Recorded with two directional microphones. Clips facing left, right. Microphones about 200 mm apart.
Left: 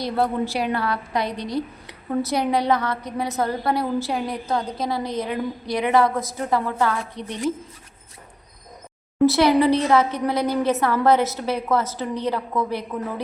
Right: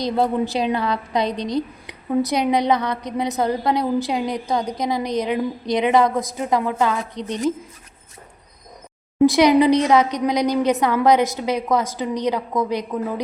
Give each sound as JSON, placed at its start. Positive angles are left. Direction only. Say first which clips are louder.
{"t": 0.0, "sound": "a woman's voice", "louder": "right 3 dB", "side_deg": -20}
{"t": 9.2, "sound": "a woman's voice", "louder": "right 3 dB", "side_deg": -15}